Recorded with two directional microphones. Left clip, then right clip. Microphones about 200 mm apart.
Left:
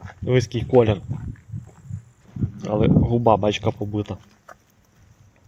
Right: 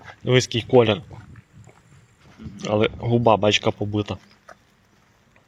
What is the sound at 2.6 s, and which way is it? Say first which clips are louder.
Speech: even; 10° left (ahead or behind).